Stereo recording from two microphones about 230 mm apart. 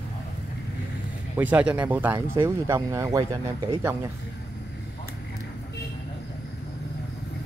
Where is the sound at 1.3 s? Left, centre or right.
Centre.